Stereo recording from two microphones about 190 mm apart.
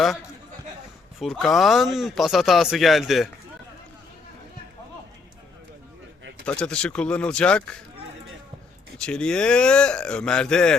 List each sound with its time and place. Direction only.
1.2 s speech: centre (ahead or behind)
6.4 s speech: 5° left (ahead or behind)
9.0 s speech: 5° left (ahead or behind)